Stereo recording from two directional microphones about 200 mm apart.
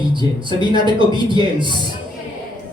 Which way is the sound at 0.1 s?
25° right (ahead or behind).